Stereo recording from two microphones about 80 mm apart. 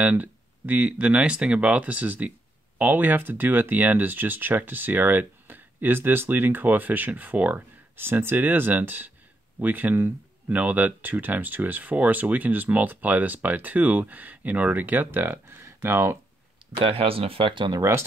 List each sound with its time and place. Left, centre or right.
0.0 s speech: centre
17.5 s speech: right
17.7 s speech: right